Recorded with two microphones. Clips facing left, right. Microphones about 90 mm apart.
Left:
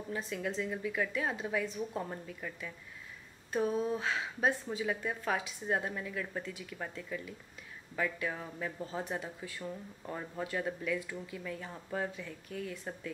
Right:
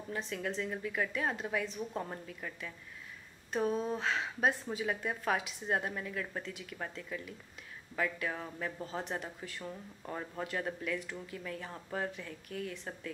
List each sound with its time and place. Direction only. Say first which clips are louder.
0.1 s speech: even; centre (ahead or behind)
3.7 s speech: left 1 dB; 5° left (ahead or behind)